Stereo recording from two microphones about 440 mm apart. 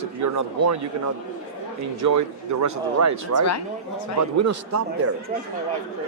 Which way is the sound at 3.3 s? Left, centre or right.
Left.